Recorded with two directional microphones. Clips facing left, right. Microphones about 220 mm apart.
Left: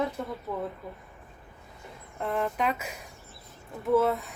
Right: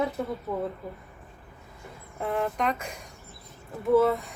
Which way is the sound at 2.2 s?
Centre (ahead or behind).